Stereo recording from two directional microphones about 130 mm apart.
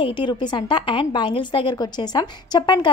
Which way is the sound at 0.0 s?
35° left (ahead or behind).